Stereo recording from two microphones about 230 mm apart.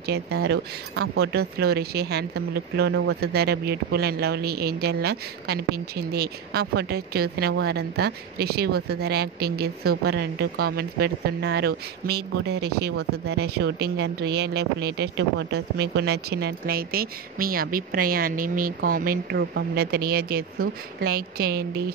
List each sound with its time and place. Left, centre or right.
0.0 s speech: right